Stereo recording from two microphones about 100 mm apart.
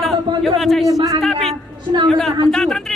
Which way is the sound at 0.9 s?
35° right (ahead or behind).